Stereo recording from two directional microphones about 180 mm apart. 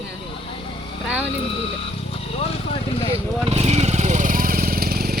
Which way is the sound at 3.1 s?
35° right (ahead or behind).